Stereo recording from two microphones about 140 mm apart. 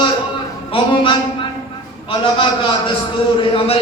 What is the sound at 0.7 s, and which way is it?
A man's voice, 35° left (ahead or behind).